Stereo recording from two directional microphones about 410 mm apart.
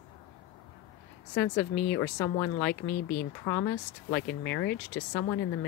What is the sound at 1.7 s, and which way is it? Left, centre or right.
Speech, left.